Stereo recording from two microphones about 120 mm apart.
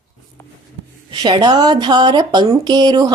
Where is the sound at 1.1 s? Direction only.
35° right (ahead or behind).